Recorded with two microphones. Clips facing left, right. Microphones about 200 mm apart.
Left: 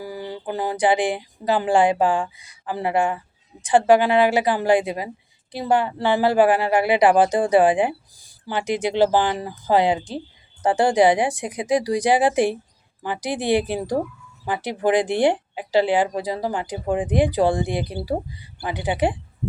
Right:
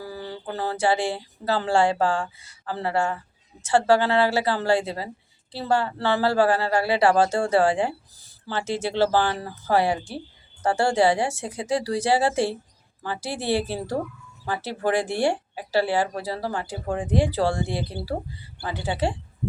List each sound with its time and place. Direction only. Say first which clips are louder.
0.0 s speech: left 3 dB; 15° left (ahead or behind)